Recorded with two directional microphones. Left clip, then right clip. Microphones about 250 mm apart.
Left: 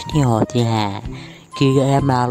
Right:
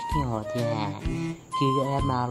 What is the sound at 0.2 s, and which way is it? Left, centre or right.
Speech, left.